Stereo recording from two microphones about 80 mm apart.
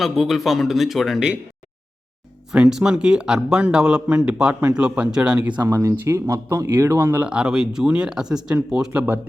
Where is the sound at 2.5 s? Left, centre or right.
Centre.